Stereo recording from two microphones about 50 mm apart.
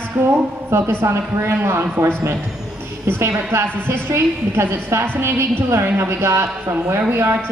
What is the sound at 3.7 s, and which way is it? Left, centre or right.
A woman's voice, right.